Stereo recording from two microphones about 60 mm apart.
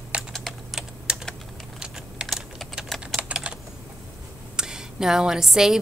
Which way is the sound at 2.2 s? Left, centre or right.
Centre.